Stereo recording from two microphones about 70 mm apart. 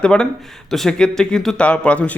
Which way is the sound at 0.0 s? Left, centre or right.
Centre.